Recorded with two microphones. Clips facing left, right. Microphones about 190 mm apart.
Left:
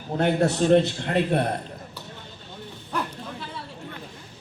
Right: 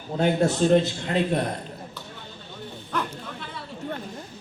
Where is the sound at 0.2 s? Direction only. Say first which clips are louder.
Even; 65° left (ahead or behind).